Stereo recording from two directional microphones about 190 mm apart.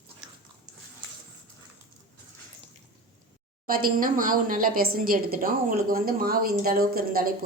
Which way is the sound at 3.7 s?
50° right (ahead or behind).